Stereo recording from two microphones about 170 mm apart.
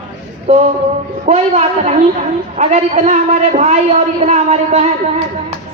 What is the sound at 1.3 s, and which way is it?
A man's voice, 40° right (ahead or behind).